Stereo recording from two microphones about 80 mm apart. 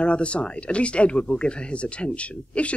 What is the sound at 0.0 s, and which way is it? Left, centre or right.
Speech, centre.